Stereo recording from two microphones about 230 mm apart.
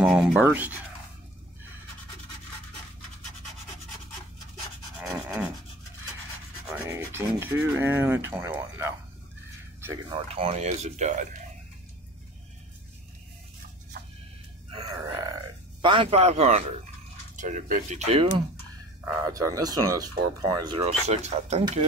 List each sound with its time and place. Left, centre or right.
0.0 s speech: centre
5.0 s rub: centre
6.9 s speech: centre
10.0 s speech: right
14.7 s a sound: centre
15.8 s speech: right
19.2 s speech: centre